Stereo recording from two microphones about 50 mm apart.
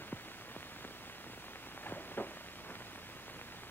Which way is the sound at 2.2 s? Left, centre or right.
Left.